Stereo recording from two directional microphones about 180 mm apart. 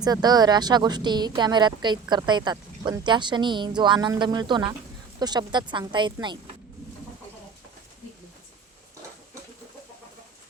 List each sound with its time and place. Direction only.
0.0 s speech: 20° right (ahead or behind)